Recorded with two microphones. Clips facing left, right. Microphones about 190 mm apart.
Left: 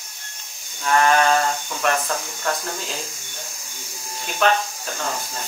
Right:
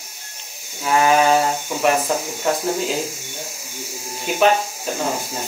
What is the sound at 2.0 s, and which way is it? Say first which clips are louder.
Speech: right 5 dB; 20° right (ahead or behind).